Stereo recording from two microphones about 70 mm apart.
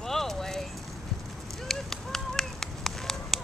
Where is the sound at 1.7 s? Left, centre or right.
Centre.